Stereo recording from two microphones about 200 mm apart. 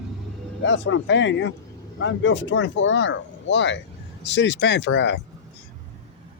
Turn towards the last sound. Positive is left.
turn(degrees=65)  # may be behind; listen again after turning